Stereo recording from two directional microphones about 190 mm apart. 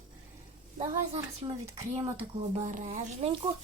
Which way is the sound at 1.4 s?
25° right (ahead or behind).